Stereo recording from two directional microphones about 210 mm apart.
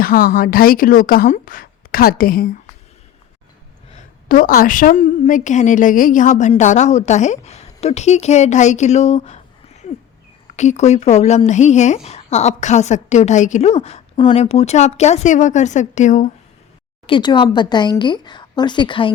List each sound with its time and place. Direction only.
0.0 s a woman's voice: 45° left (ahead or behind)
3.9 s a woman's voice: 40° left (ahead or behind)
17.1 s speech: 20° left (ahead or behind)